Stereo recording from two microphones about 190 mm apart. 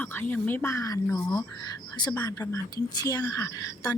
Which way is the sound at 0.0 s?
10° left (ahead or behind).